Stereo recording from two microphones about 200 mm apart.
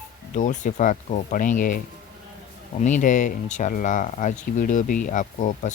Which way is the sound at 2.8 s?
40° left (ahead or behind).